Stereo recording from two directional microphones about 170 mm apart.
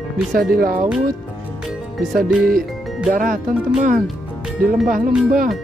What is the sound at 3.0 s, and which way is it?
Speech, 50° right (ahead or behind).